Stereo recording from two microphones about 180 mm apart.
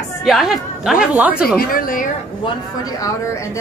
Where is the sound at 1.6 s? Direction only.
50° left (ahead or behind).